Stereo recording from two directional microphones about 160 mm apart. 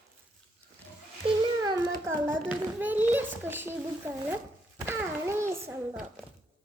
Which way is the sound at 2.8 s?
10° right (ahead or behind).